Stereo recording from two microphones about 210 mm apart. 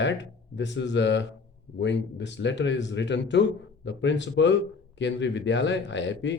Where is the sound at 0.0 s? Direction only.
60° left (ahead or behind).